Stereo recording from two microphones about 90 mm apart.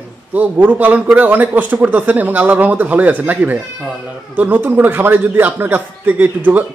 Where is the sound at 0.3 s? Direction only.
20° right (ahead or behind).